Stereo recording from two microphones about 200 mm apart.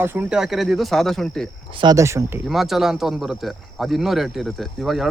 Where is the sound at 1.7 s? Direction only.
25° right (ahead or behind).